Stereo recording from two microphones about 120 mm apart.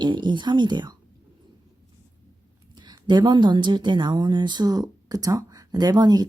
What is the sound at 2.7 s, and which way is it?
Speech, 35° right (ahead or behind).